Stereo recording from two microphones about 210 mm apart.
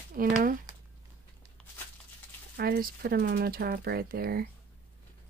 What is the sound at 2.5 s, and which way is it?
Speech, 45° right (ahead or behind).